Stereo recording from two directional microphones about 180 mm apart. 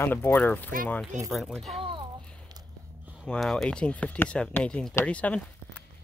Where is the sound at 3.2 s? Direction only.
Centre (ahead or behind).